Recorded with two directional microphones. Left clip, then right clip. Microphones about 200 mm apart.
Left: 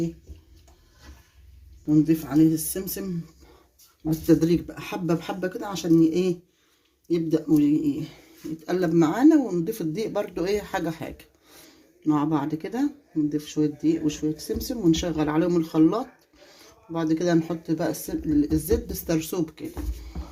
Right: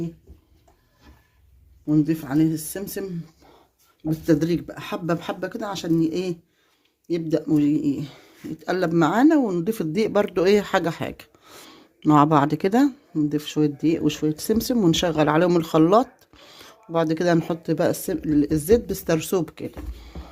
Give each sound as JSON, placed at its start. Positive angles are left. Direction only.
{"t": 1.9, "sound": "speech", "side_deg": -45}
{"t": 4.3, "sound": "speech", "side_deg": -45}
{"t": 20.1, "sound": "music", "side_deg": -50}